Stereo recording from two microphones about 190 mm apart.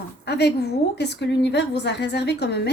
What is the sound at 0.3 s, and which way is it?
A woman's voice, 60° left (ahead or behind).